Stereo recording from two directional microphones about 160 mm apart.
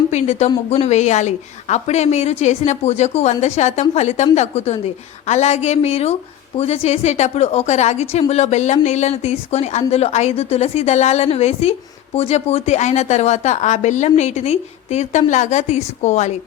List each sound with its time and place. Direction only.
0.1 s a woman's voice: 45° left (ahead or behind)